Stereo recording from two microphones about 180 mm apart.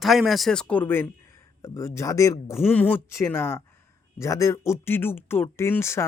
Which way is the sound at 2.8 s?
10° left (ahead or behind).